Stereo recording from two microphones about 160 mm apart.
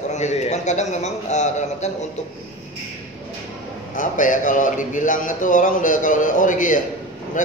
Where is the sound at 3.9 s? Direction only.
55° left (ahead or behind).